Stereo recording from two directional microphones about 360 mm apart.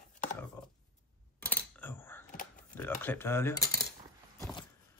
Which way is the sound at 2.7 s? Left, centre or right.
Centre.